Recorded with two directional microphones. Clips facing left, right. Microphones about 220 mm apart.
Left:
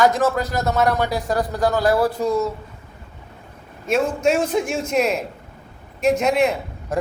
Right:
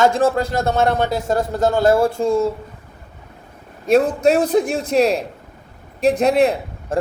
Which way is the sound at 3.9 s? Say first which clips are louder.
Right 5 dB; 35° right (ahead or behind).